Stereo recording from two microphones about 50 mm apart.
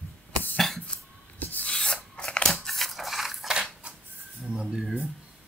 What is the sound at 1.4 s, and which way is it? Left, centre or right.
Rub, left.